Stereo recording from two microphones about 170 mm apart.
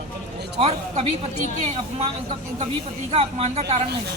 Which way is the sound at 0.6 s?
40° right (ahead or behind).